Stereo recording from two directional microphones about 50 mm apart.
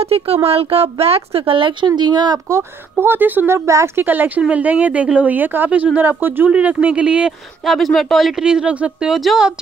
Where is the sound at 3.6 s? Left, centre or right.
Right.